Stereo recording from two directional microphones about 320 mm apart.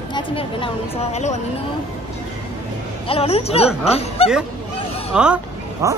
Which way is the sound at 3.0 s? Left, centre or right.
Centre.